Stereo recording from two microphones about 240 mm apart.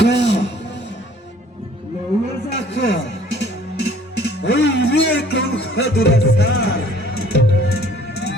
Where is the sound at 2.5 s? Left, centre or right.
Left.